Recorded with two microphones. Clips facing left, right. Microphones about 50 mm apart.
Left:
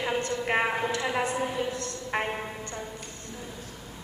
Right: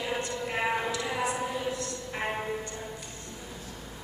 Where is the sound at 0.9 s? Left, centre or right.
Left.